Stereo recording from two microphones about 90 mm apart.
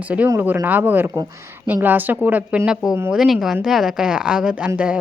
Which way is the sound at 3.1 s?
5° right (ahead or behind).